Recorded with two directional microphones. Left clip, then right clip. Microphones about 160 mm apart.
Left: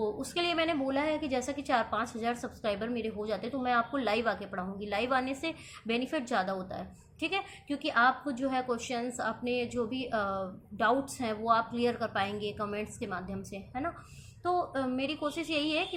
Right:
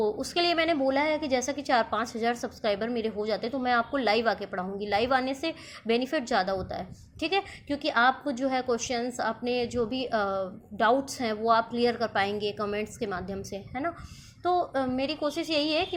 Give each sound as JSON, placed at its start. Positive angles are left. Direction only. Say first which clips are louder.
{"t": 0.0, "sound": "a woman's voice", "louder": "right 5 dB", "side_deg": -35}